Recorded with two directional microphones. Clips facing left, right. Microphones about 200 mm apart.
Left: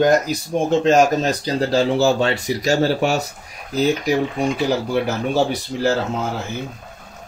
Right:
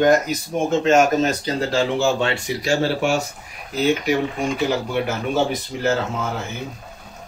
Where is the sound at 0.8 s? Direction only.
35° left (ahead or behind).